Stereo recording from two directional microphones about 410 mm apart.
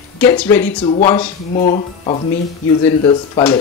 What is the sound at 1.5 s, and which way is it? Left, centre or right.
Speech, centre.